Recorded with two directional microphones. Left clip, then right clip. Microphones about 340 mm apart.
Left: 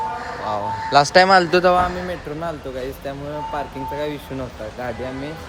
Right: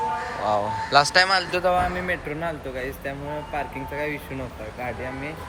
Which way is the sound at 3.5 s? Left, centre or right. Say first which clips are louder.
Left 2 dB; centre.